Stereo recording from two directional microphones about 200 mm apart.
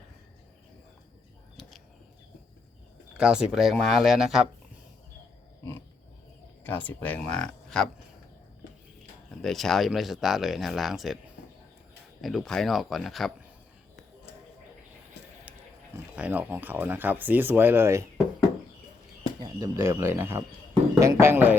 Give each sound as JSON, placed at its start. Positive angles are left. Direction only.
{"t": 1.6, "sound": "a sound", "side_deg": 0}
{"t": 3.2, "sound": "speech", "side_deg": -5}
{"t": 6.7, "sound": "speech", "side_deg": 10}
{"t": 9.4, "sound": "speech", "side_deg": 0}
{"t": 12.2, "sound": "speech", "side_deg": 0}
{"t": 15.2, "sound": "a sound", "side_deg": 60}
{"t": 16.1, "sound": "speech", "side_deg": -5}
{"t": 19.4, "sound": "speech", "side_deg": -15}